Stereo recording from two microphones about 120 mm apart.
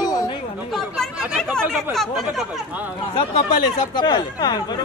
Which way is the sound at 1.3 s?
5° left (ahead or behind).